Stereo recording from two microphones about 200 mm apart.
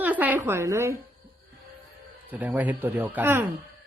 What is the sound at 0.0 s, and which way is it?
Speech, 10° right (ahead or behind).